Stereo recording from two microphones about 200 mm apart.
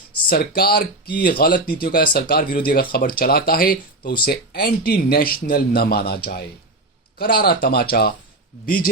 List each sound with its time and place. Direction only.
0.3 s speech: 50° left (ahead or behind)